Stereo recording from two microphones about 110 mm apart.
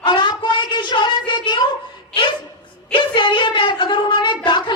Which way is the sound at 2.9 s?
50° left (ahead or behind).